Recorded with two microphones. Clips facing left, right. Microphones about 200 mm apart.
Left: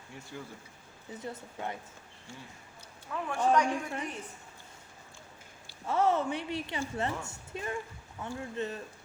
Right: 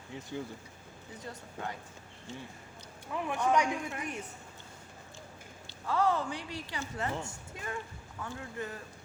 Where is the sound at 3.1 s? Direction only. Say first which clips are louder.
Right 1 dB; 15° right (ahead or behind).